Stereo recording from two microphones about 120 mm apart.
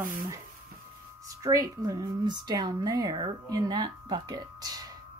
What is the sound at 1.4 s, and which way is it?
A woman's voice, 30° right (ahead or behind).